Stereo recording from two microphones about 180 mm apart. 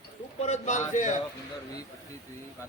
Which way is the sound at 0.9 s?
45° left (ahead or behind).